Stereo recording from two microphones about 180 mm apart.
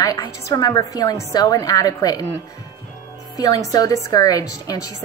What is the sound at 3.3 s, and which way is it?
Speech, 20° left (ahead or behind).